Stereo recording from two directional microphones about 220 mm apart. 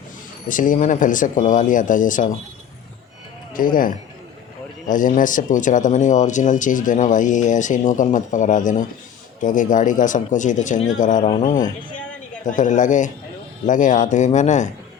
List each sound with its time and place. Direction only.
0.4 s speech: 35° left (ahead or behind)
3.5 s speech: 40° left (ahead or behind)
11.9 s a sound: 5° left (ahead or behind)
12.5 s speech: 35° left (ahead or behind)